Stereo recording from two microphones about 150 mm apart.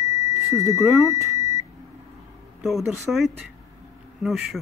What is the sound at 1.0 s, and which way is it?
Beep, 20° right (ahead or behind).